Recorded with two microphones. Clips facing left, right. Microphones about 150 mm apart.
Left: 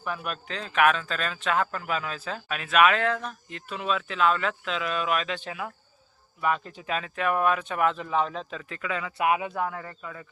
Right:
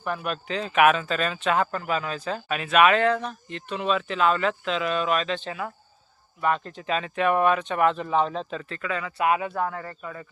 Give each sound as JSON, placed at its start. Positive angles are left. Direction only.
{"t": 0.0, "sound": "speech", "side_deg": 0}
{"t": 8.0, "sound": "speech", "side_deg": -35}
{"t": 8.7, "sound": "speech", "side_deg": 15}